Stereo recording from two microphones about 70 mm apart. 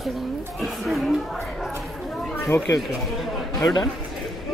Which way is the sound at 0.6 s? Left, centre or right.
Centre.